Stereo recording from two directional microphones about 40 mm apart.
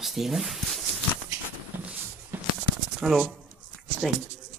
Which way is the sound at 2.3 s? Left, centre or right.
Right.